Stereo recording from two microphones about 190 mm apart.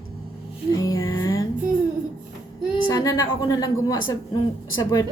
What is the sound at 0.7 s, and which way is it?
Music, 15° left (ahead or behind).